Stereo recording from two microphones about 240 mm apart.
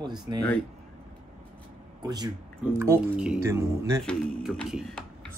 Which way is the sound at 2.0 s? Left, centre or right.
Centre.